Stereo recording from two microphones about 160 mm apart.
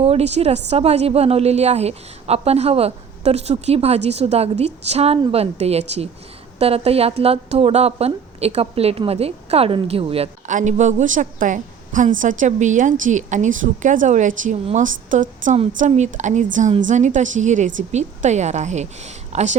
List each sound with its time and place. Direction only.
0.0 s a woman's voice: 40° right (ahead or behind)
10.4 s a woman's voice: 50° right (ahead or behind)